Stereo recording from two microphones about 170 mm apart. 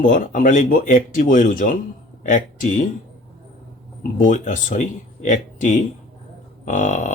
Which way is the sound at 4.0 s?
50° left (ahead or behind).